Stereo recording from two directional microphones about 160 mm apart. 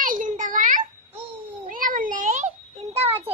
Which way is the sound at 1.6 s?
60° right (ahead or behind).